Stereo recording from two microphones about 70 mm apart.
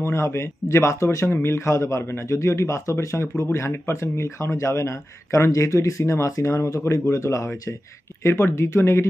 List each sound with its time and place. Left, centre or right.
0.0 s a man's voice: left